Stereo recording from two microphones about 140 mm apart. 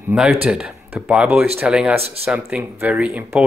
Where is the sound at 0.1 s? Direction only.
10° right (ahead or behind).